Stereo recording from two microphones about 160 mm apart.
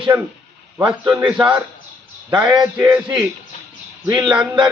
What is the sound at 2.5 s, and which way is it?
Speech, 25° right (ahead or behind).